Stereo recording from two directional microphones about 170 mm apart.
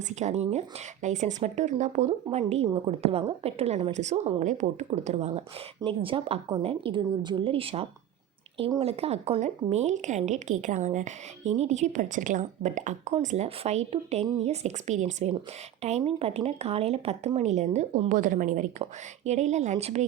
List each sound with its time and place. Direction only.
0.1 s a woman's voice: 45° right (ahead or behind)